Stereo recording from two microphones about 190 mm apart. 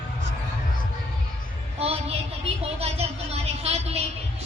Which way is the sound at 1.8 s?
30° right (ahead or behind).